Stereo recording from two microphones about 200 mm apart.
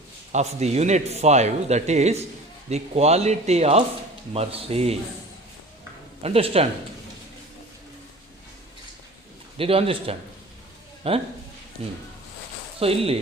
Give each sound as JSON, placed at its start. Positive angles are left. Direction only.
{"t": 0.3, "sound": "a man's voice", "side_deg": -30}
{"t": 6.2, "sound": "a man's voice", "side_deg": -30}
{"t": 9.6, "sound": "a man's voice", "side_deg": -30}